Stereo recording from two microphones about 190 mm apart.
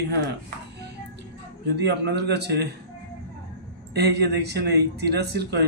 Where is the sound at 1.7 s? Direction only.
60° right (ahead or behind).